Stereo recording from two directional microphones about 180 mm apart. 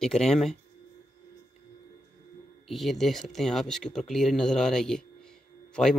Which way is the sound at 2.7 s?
Centre (ahead or behind).